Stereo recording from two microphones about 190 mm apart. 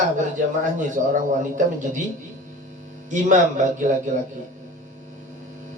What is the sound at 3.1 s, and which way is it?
Speech, 40° right (ahead or behind).